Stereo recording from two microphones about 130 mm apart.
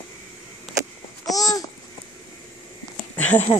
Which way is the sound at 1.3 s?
30° left (ahead or behind).